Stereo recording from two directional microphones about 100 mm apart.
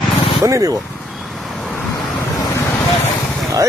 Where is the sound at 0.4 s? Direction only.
35° right (ahead or behind).